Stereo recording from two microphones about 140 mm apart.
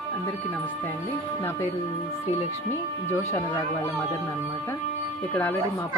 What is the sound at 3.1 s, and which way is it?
Speech, 20° left (ahead or behind).